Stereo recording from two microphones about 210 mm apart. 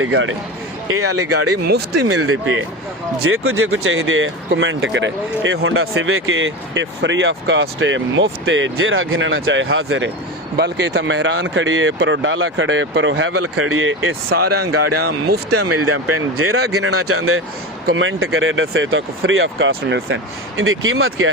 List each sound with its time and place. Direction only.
0.0 s speech: 65° right (ahead or behind)
2.0 s speech: 75° right (ahead or behind)
10.6 s speech: 55° right (ahead or behind); by 14.2 s 70° right (ahead or behind)
14.3 s speech: 50° right (ahead or behind)
15.4 s speech: 90° right
17.8 s speech: 65° right (ahead or behind)